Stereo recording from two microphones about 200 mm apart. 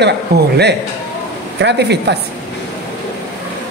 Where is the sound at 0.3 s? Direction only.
55° right (ahead or behind).